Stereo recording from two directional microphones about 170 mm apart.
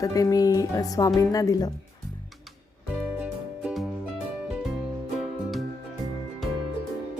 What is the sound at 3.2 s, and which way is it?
Music, centre (ahead or behind).